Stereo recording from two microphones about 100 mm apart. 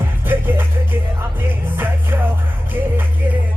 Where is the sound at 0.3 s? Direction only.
20° right (ahead or behind).